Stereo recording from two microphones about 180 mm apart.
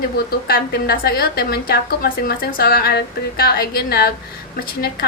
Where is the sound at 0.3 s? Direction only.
60° left (ahead or behind).